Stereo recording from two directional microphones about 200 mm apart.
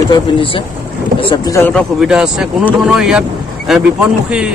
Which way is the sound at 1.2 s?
20° left (ahead or behind).